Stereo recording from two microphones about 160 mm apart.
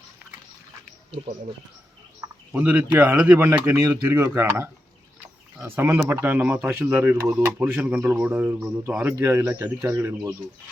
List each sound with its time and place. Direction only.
2.5 s speech: 10° right (ahead or behind)